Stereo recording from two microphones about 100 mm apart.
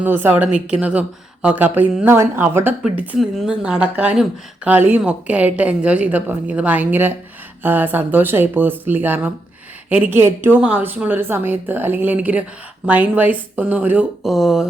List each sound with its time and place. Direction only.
0.0 s speech: 20° right (ahead or behind)
0.7 s a woman's voice: 10° right (ahead or behind)
3.2 s a woman's voice: 5° right (ahead or behind)
14.2 s speech: centre (ahead or behind)